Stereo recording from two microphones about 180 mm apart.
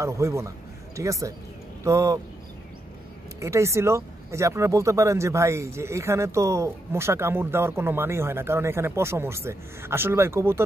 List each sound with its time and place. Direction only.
0.0 s speech: 15° right (ahead or behind)
3.3 s speech: 15° right (ahead or behind)